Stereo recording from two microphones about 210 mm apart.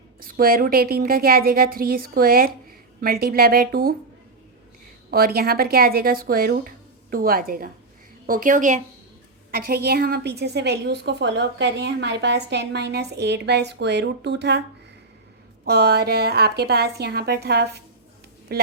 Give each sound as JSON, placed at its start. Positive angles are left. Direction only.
{"t": 0.2, "sound": "a woman's voice", "side_deg": -45}
{"t": 5.1, "sound": "a woman's voice", "side_deg": -45}
{"t": 15.6, "sound": "a woman's voice", "side_deg": -50}